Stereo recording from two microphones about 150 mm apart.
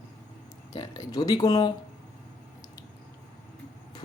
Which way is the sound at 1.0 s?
25° left (ahead or behind).